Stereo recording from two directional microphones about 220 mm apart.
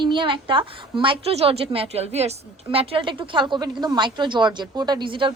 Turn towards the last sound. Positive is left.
turn(degrees=-20)  # may be behind; listen again after turning